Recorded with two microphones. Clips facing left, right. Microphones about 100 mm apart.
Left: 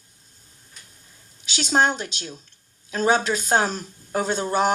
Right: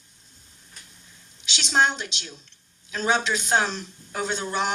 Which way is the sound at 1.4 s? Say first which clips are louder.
Left 2 dB; 40° left (ahead or behind).